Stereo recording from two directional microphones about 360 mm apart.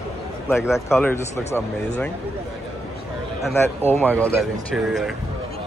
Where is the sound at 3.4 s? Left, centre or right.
Centre.